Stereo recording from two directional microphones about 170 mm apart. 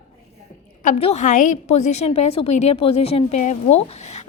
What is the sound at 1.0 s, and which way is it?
A woman's voice, 40° left (ahead or behind).